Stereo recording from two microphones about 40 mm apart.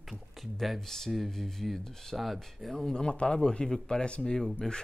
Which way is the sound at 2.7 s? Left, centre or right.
Centre.